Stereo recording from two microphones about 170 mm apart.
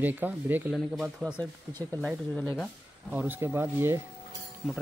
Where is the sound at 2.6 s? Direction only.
10° right (ahead or behind).